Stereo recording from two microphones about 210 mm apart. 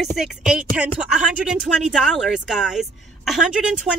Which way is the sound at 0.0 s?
Centre (ahead or behind).